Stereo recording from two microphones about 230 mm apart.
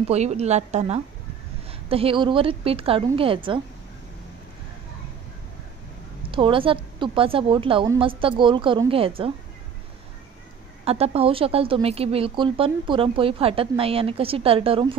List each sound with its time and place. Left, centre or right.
0.1 s speech: right
6.3 s speech: right
10.9 s speech: right